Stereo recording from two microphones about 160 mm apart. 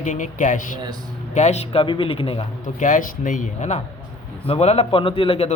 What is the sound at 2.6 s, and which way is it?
A man's voice, 55° left (ahead or behind).